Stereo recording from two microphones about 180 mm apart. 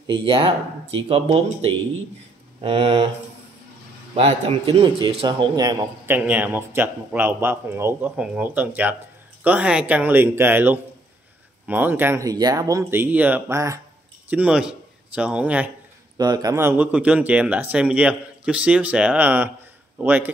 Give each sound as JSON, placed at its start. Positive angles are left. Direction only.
{"t": 0.0, "sound": "a man's voice", "side_deg": -25}
{"t": 4.1, "sound": "a man's voice", "side_deg": -35}
{"t": 6.1, "sound": "a man's voice", "side_deg": -10}
{"t": 16.2, "sound": "speech", "side_deg": -20}